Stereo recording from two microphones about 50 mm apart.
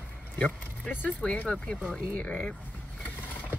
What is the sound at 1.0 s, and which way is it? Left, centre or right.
Speech, left.